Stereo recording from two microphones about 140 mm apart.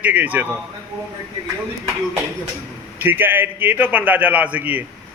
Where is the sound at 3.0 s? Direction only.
15° right (ahead or behind).